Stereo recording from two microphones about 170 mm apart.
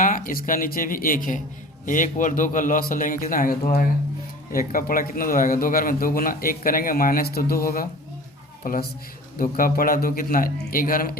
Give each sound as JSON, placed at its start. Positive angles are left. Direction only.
{"t": 0.0, "sound": "a man's voice", "side_deg": 55}